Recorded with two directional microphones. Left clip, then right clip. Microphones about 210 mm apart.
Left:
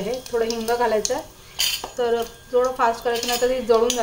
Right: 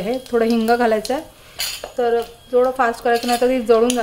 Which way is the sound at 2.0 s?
30° right (ahead or behind).